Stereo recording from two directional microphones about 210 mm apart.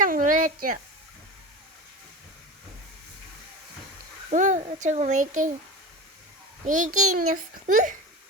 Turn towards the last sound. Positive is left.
turn(degrees=-35)  # may be behind; listen again after turning